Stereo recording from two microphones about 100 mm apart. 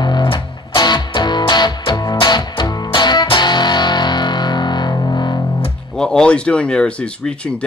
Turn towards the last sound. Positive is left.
turn(degrees=10)  # may be behind; listen again after turning